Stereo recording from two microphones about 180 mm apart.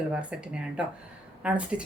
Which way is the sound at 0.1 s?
5° right (ahead or behind).